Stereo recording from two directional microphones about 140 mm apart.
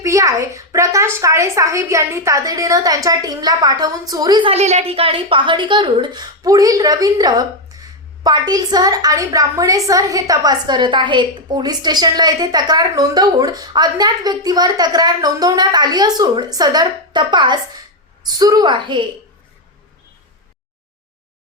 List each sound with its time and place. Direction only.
0.0 s a woman's voice: 20° right (ahead or behind)
4.5 s a woman's voice: 50° right (ahead or behind); by 19.0 s 35° right (ahead or behind)